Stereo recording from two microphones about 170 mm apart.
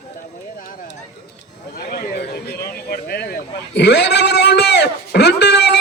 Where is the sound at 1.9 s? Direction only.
65° left (ahead or behind).